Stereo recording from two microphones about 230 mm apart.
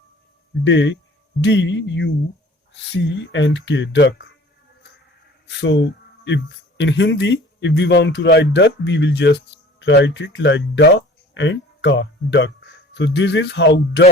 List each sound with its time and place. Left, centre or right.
0.6 s speech: left
5.5 s speech: left